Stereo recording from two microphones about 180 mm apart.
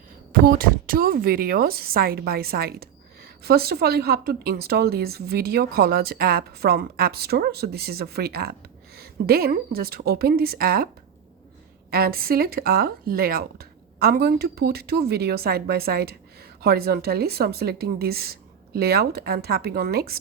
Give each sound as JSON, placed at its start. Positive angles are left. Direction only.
{"t": 0.3, "sound": "speech", "side_deg": -55}
{"t": 11.9, "sound": "speech", "side_deg": -55}